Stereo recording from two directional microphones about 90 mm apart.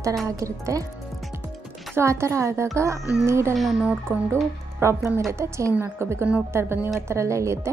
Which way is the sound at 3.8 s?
15° right (ahead or behind).